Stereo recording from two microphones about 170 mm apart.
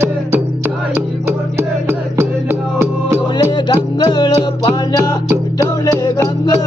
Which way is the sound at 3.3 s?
25° left (ahead or behind).